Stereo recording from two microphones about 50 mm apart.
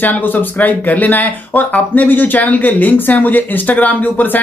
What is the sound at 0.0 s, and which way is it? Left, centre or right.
Speech, left.